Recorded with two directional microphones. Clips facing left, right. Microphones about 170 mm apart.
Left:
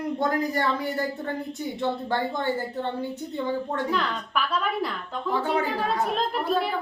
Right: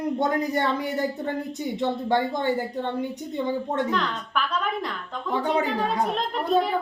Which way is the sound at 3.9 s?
5° left (ahead or behind).